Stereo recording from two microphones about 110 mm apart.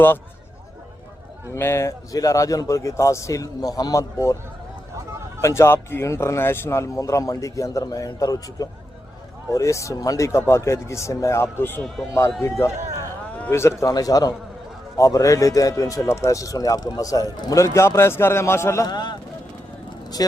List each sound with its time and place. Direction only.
1.5 s speech: 25° left (ahead or behind)
5.4 s speech: 25° left (ahead or behind)
18.9 s speech: 40° left (ahead or behind)